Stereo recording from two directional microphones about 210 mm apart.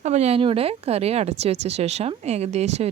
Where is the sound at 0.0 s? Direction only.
30° right (ahead or behind).